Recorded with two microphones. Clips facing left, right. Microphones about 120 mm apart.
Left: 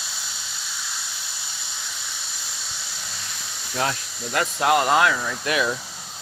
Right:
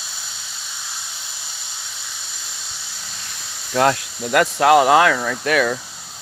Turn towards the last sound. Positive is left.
turn(degrees=-55)  # may be behind; listen again after turning